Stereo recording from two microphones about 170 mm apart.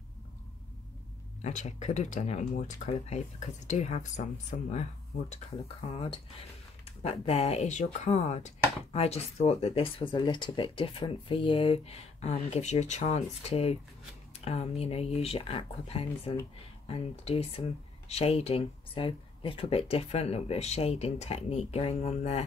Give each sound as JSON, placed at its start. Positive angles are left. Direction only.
{"t": 1.4, "sound": "speech", "side_deg": 45}
{"t": 7.0, "sound": "speech", "side_deg": 35}